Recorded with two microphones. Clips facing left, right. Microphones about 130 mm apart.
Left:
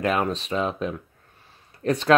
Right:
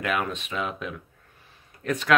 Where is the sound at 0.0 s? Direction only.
35° left (ahead or behind).